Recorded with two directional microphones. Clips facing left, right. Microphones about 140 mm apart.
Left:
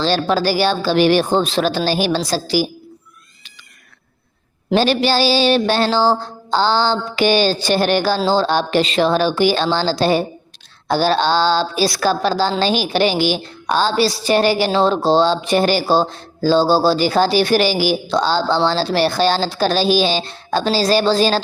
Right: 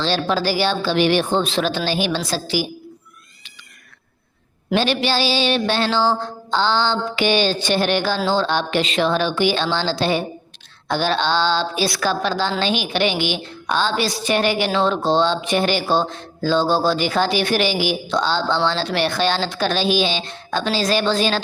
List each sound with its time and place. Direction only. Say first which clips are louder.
0.0 s speech: left 3 dB; 40° left (ahead or behind)
4.7 s speech: left 4 dB; 40° left (ahead or behind)